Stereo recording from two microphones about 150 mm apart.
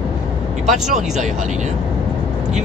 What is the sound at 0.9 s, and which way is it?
Speech, 50° right (ahead or behind).